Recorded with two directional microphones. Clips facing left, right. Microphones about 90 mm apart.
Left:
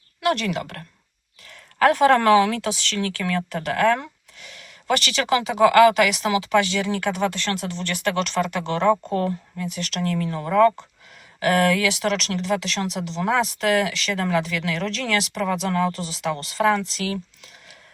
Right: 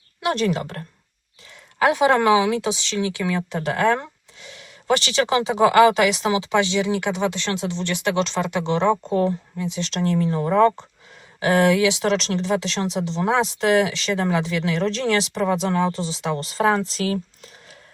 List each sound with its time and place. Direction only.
0.2 s speech: 25° right (ahead or behind)
1.5 s speech: 15° right (ahead or behind); by 17.7 s 35° right (ahead or behind)